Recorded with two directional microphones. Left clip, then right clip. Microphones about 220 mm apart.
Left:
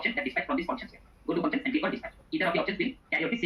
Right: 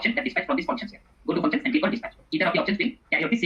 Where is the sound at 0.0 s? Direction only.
55° right (ahead or behind).